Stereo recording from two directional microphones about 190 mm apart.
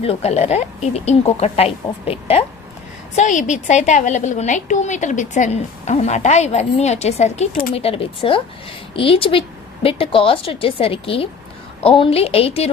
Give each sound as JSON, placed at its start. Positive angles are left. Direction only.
{"t": 0.0, "sound": "a woman's voice", "side_deg": 35}
{"t": 3.2, "sound": "a woman's voice", "side_deg": 40}